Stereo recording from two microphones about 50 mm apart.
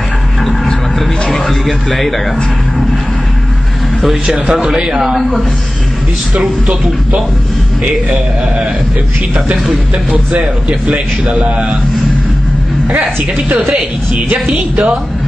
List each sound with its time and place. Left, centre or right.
0.5 s a sound: centre
1.3 s speech: centre
4.0 s speech: centre
4.7 s a man's voice: centre
7.8 s speech: right
10.3 s speech: right
14.1 s speech: right